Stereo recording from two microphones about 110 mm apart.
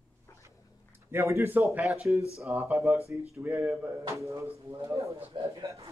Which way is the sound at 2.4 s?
25° right (ahead or behind).